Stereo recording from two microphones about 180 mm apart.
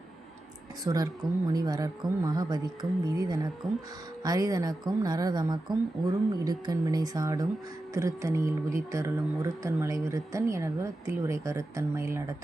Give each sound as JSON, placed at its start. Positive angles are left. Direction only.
{"t": 0.9, "sound": "a woman's voice", "side_deg": -20}